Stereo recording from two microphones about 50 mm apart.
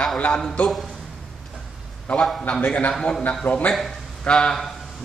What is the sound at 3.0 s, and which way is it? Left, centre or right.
Speech, centre.